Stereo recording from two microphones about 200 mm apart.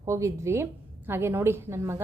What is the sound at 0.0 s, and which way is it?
Speech, 15° right (ahead or behind).